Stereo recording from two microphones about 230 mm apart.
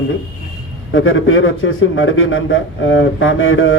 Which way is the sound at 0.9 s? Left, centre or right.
Left.